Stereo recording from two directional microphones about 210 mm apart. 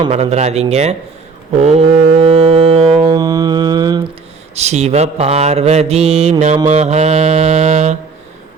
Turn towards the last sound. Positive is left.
turn(degrees=-35)  # may be behind; listen again after turning